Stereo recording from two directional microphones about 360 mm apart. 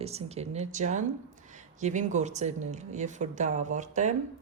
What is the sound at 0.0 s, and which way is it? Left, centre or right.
A woman's voice, centre.